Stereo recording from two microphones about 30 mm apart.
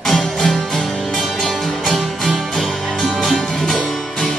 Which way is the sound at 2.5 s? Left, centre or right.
Centre.